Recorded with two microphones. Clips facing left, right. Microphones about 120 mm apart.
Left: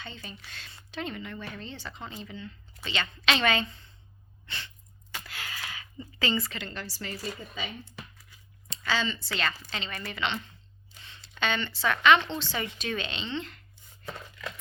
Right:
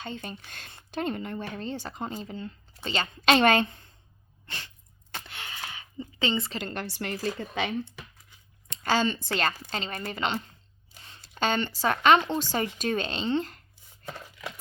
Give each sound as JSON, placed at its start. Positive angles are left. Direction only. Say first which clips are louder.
{"t": 0.0, "sound": "speech", "louder": "right 6 dB", "side_deg": -50}
{"t": 4.4, "sound": "sneeze", "louder": "even", "side_deg": -45}
{"t": 5.1, "sound": "a sound", "louder": "even", "side_deg": -25}
{"t": 6.6, "sound": "a woman's voice", "louder": "right 5 dB", "side_deg": -50}
{"t": 8.7, "sound": "a woman's voice", "louder": "right 5 dB", "side_deg": -45}